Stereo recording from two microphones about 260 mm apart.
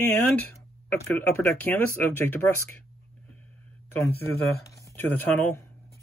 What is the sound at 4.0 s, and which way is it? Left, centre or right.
Speech, centre.